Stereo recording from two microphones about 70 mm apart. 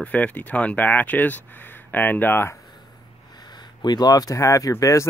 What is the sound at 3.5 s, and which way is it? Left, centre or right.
Speech, left.